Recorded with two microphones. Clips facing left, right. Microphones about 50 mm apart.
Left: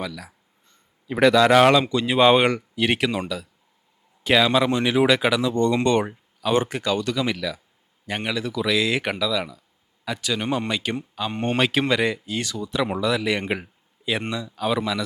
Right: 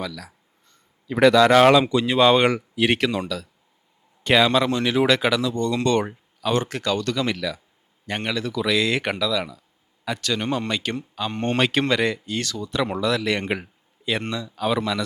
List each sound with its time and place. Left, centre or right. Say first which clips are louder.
0.0 s speech: even; centre
2.0 s speech: left 2 dB; centre
2.5 s a man's voice: right 2 dB; centre
4.6 s speech: left 1 dB; centre
5.4 s speech: left 2 dB; left; by 15.0 s centre